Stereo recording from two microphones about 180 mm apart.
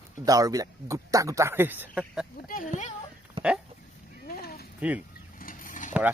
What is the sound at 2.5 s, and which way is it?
Speech, 45° left (ahead or behind).